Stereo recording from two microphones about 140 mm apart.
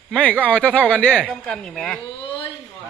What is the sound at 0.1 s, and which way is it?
A man's voice, 10° left (ahead or behind).